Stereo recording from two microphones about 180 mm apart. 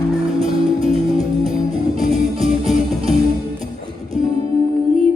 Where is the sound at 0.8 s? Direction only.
30° right (ahead or behind).